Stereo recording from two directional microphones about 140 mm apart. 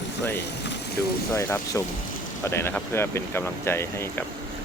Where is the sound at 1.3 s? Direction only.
20° left (ahead or behind).